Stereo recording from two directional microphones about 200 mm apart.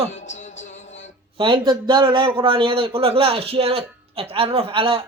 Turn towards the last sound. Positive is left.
turn(degrees=-25)  # may be behind; listen again after turning